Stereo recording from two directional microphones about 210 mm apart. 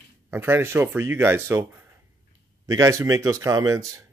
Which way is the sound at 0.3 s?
10° right (ahead or behind).